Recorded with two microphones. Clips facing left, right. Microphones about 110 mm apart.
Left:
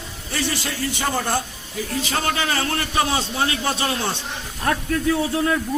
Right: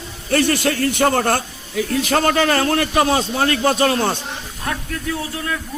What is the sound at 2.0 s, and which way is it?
A man's voice, 50° right (ahead or behind).